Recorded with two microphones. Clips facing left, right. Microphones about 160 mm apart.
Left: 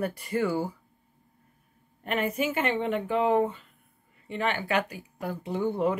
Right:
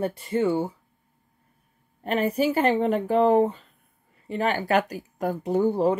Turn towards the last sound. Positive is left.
turn(degrees=-35)  # may be behind; listen again after turning